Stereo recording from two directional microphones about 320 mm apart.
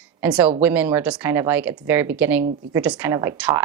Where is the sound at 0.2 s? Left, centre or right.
Centre.